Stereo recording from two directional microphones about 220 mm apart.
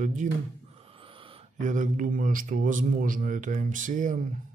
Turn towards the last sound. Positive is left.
turn(degrees=-35)  # may be behind; listen again after turning